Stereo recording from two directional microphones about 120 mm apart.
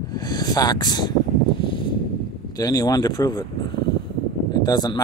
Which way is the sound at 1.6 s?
45° left (ahead or behind).